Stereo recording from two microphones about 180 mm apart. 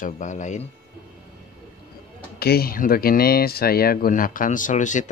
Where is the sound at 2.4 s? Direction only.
60° left (ahead or behind); by 5.1 s 45° left (ahead or behind).